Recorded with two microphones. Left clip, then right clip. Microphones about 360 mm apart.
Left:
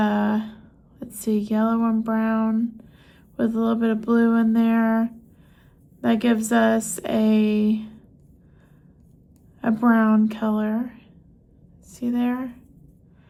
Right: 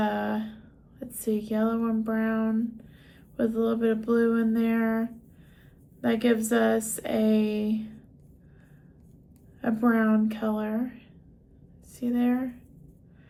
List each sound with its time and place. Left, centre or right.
0.0 s a sound: left
3.3 s a woman's voice: left
9.6 s a woman's voice: left